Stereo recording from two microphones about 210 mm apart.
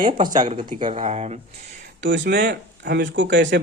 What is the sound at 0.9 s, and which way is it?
Speech, 30° right (ahead or behind).